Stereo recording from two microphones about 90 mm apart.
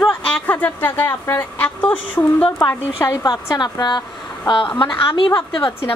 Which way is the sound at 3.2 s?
50° left (ahead or behind).